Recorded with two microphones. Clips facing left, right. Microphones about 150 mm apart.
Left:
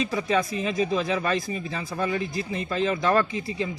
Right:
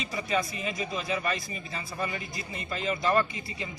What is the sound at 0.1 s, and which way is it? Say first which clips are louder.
Speech: left 5 dB; 90° left.